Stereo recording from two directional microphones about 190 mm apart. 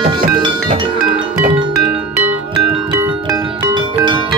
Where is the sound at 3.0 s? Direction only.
20° right (ahead or behind).